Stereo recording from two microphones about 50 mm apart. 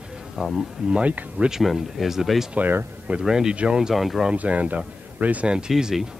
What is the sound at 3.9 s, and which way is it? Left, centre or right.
Speech, centre.